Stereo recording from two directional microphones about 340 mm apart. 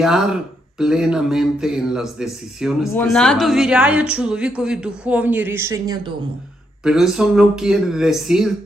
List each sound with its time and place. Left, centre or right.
0.0 s speech: centre